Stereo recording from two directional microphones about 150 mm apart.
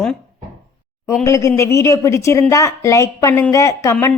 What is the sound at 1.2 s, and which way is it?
A woman's voice, 20° left (ahead or behind).